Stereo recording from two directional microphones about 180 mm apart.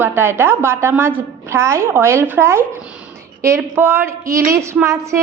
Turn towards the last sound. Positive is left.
turn(degrees=-15)  # may be behind; listen again after turning